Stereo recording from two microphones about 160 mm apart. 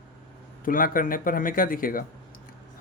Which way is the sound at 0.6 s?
60° left (ahead or behind).